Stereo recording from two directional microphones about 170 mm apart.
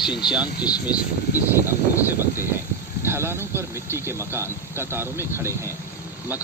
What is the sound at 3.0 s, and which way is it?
Speech, 15° right (ahead or behind).